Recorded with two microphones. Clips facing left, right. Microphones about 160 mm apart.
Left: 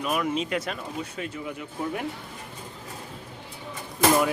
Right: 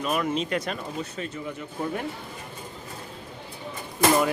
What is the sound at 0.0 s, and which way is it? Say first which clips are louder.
Speech: even; 5° left (ahead or behind).